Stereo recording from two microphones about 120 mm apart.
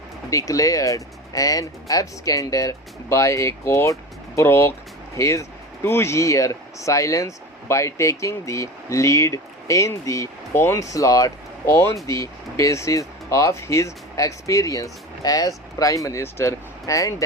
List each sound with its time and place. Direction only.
0.3 s speech: 30° left (ahead or behind)